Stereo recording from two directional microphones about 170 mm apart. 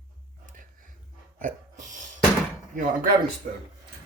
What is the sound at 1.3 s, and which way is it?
Hiccup, 50° right (ahead or behind).